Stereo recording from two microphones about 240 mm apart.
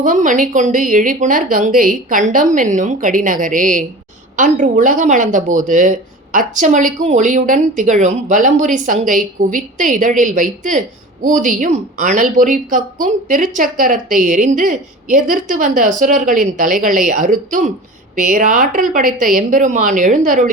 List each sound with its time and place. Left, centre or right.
0.0 s speech: right